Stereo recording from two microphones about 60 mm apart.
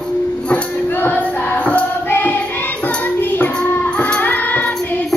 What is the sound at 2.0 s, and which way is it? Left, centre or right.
Choir, left.